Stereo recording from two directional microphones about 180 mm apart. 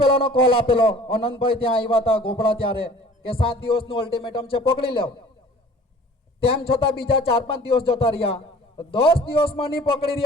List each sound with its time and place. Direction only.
0.0 s a man's voice: 30° left (ahead or behind)
6.4 s a man's voice: 30° left (ahead or behind)